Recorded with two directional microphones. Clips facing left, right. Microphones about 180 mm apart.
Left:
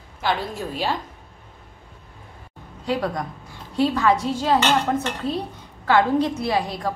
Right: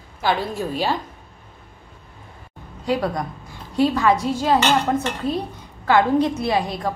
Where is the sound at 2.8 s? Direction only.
10° right (ahead or behind).